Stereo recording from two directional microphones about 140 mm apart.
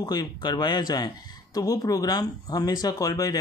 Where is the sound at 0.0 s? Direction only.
30° left (ahead or behind).